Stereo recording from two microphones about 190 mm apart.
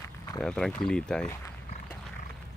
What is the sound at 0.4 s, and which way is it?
Speech, 5° left (ahead or behind).